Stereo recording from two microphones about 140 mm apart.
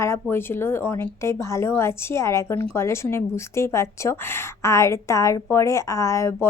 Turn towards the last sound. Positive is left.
turn(degrees=20)  # may be behind; listen again after turning